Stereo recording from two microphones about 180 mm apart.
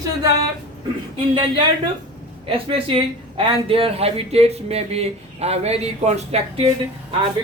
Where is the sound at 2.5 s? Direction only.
30° right (ahead or behind).